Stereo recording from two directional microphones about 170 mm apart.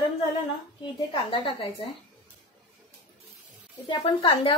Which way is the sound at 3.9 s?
30° left (ahead or behind).